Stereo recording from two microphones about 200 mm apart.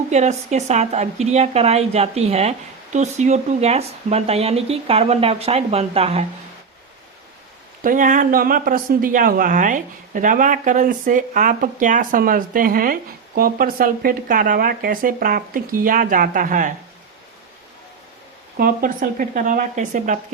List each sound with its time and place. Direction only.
0.1 s speech: 35° right (ahead or behind)
7.9 s speech: 40° right (ahead or behind)
18.5 s speech: 45° right (ahead or behind)